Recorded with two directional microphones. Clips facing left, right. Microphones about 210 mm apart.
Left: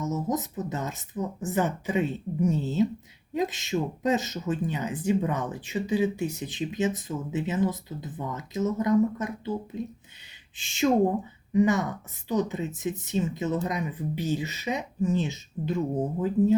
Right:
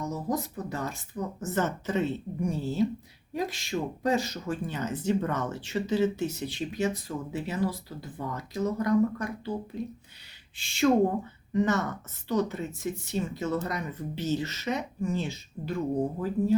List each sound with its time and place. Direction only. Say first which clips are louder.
0.0 s a woman's voice: left 2 dB; 20° left (ahead or behind)